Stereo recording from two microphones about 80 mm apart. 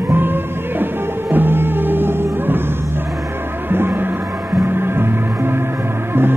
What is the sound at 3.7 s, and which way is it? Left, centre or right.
Music, right.